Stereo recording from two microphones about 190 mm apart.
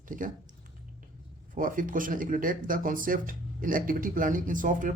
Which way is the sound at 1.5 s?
45° right (ahead or behind).